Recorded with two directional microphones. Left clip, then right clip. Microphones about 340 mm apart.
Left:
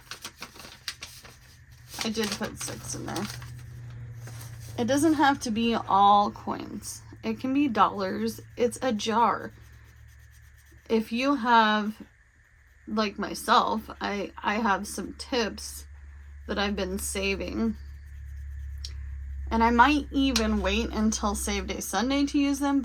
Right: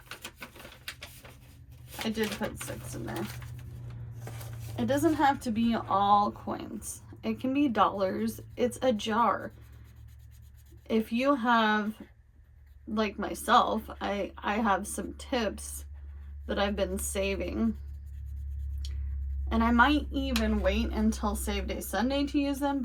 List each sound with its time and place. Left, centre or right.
0.1 s bird: centre
2.0 s speech: centre
4.8 s speech: left
10.8 s speech: centre
12.9 s speech: centre
19.5 s speech: centre